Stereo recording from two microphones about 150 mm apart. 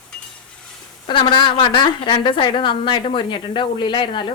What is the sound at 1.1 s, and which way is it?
A woman's voice, 30° left (ahead or behind).